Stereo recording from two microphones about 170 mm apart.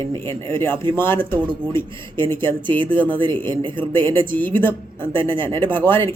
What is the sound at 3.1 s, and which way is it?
Speech, 30° right (ahead or behind).